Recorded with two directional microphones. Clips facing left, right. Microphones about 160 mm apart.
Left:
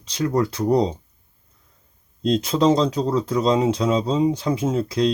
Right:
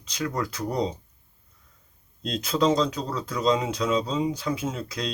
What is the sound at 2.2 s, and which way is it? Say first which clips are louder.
Speech: left 6 dB; 30° left (ahead or behind).